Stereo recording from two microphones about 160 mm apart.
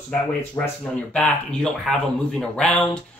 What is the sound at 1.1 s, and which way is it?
Speech, 5° left (ahead or behind).